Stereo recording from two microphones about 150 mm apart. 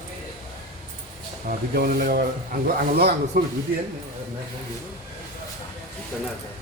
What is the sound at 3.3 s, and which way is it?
Speech, 90° right.